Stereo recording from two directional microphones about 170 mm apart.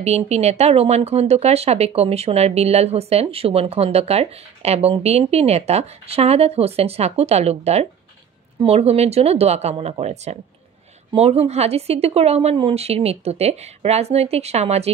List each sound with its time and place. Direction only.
0.0 s speech: 40° right (ahead or behind)